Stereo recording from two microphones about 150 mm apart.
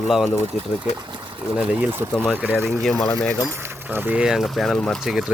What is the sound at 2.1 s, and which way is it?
Speech, 5° left (ahead or behind).